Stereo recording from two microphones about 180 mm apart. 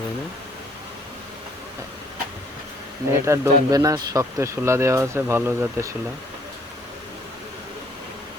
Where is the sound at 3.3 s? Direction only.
20° right (ahead or behind).